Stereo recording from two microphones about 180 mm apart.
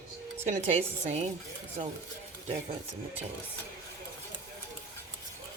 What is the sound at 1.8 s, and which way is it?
Speech, 45° right (ahead or behind).